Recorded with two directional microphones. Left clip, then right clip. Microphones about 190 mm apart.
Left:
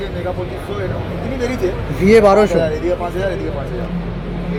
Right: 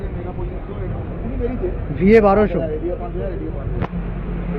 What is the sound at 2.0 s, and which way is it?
Speech, 15° left (ahead or behind).